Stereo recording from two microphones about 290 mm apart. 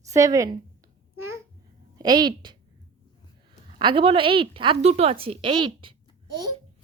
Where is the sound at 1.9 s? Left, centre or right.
Centre.